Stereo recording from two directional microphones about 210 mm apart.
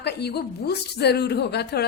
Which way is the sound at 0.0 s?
50° left (ahead or behind).